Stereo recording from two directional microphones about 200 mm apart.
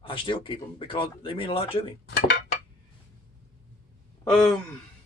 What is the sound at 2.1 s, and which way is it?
Speech, 55° left (ahead or behind).